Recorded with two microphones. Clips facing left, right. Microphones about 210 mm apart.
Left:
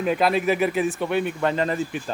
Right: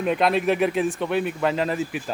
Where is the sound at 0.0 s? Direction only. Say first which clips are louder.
Even; centre (ahead or behind).